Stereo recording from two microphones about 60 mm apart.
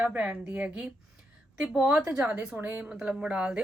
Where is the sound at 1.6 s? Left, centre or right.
Centre.